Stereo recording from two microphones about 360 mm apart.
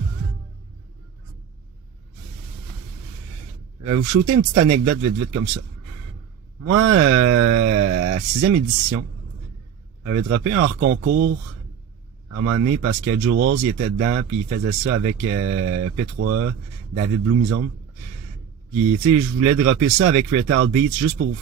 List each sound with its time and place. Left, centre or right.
3.8 s speech: right
13.8 s speech: right
19.0 s speech: right